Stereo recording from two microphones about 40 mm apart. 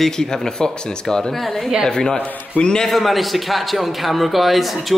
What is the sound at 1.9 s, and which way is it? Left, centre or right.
Speech, centre.